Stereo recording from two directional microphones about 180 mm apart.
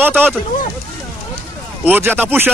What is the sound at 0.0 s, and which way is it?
Speech, 10° right (ahead or behind).